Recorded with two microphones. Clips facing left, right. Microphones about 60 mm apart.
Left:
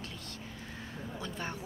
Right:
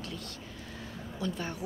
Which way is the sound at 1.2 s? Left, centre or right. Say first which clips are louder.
Right 5 dB; left.